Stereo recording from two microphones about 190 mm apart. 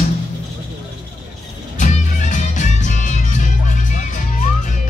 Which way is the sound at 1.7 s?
40° left (ahead or behind).